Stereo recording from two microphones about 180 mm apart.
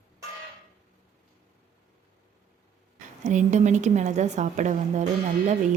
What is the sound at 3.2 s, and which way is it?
A woman's voice, 40° right (ahead or behind).